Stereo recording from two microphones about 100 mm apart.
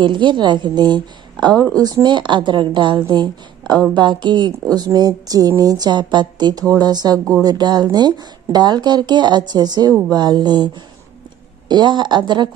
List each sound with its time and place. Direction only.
0.0 s a woman's voice: 50° right (ahead or behind)
11.7 s speech: 50° right (ahead or behind)